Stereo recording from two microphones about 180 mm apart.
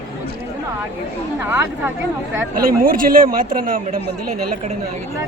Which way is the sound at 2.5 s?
55° right (ahead or behind).